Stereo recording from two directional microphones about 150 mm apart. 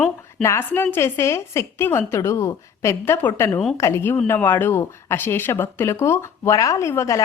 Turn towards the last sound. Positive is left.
turn(degrees=20)  # may be behind; listen again after turning